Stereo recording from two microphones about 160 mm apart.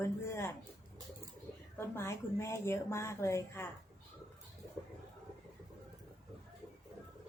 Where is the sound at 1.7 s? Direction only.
15° left (ahead or behind).